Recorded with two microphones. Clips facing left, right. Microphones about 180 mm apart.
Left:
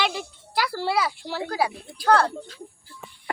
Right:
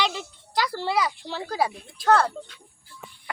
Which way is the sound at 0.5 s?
20° right (ahead or behind).